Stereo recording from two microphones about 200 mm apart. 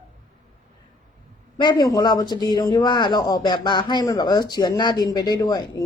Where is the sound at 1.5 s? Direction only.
20° left (ahead or behind).